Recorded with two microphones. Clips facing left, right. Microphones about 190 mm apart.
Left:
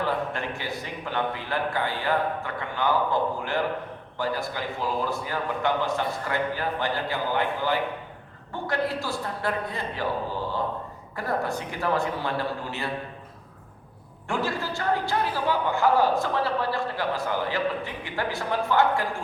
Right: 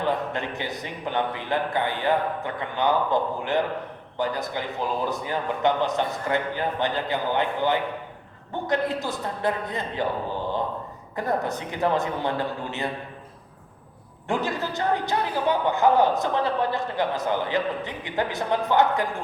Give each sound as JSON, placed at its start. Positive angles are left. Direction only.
{"t": 0.0, "sound": "a man's voice", "side_deg": -20}
{"t": 11.2, "sound": "a man's voice", "side_deg": -20}
{"t": 14.3, "sound": "a man's voice", "side_deg": -20}